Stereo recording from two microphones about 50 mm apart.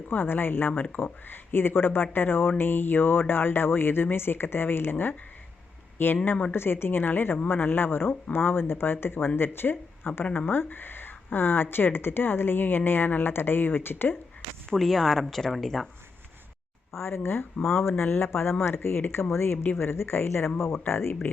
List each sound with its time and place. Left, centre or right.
0.1 s speech: left
14.7 s speech: centre
17.0 s speech: left
20.7 s speech: left